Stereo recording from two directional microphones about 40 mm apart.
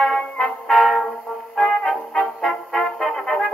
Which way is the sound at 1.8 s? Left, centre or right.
Centre.